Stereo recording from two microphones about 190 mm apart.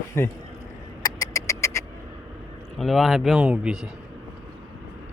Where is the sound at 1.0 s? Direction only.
20° left (ahead or behind).